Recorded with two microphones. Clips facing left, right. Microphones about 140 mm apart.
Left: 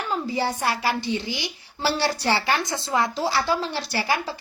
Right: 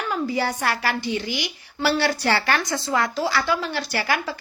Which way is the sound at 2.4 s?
20° left (ahead or behind).